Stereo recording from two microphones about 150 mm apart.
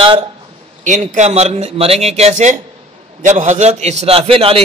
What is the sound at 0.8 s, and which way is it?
A man's voice, 55° right (ahead or behind).